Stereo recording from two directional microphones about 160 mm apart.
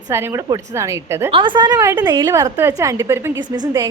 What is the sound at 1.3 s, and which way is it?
A woman's voice, 30° right (ahead or behind).